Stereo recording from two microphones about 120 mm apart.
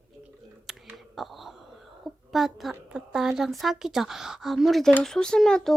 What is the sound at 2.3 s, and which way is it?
A woman's voice, centre (ahead or behind).